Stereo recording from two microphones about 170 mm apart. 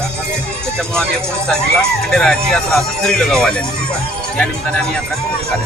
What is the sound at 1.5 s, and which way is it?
Speech, 5° left (ahead or behind).